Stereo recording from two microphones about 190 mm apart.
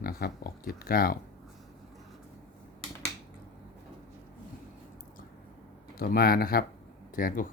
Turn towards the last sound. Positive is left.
turn(degrees=45)  # may be behind; listen again after turning